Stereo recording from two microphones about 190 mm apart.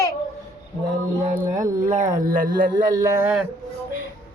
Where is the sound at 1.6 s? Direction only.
40° right (ahead or behind).